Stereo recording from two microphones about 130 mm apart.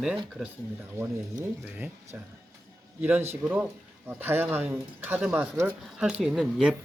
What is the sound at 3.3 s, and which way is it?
Speech, 15° right (ahead or behind).